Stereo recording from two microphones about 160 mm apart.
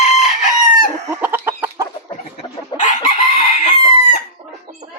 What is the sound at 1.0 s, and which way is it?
Chicken, 15° right (ahead or behind).